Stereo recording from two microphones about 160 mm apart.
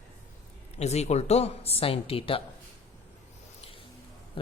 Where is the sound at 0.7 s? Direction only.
45° left (ahead or behind).